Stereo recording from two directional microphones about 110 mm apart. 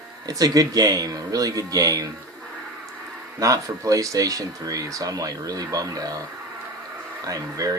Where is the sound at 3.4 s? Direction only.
30° right (ahead or behind).